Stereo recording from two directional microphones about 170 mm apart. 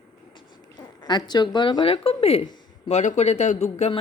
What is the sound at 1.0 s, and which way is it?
Speech, 25° left (ahead or behind).